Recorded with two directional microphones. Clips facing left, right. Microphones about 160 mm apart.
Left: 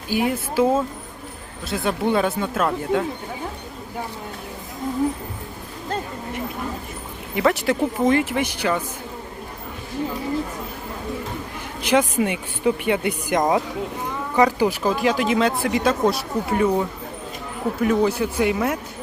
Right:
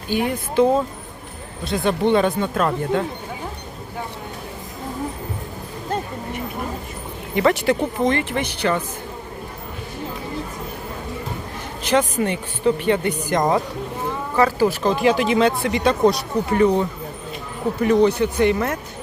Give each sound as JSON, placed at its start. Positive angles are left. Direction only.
{"t": 0.1, "sound": "speech", "side_deg": 5}
{"t": 7.3, "sound": "speech", "side_deg": 0}
{"t": 11.8, "sound": "speech", "side_deg": 10}
{"t": 14.9, "sound": "speech", "side_deg": 0}